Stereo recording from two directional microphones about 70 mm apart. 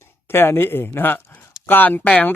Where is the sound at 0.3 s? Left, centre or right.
Left.